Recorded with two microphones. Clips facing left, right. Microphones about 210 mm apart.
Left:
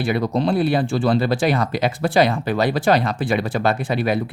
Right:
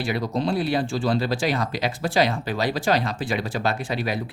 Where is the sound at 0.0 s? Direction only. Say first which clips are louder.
Left 5 dB; 60° left (ahead or behind).